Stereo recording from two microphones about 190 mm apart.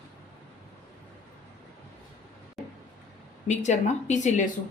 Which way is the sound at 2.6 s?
Centre (ahead or behind).